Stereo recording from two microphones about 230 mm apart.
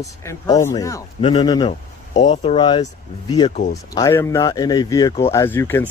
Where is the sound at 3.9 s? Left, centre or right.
Centre.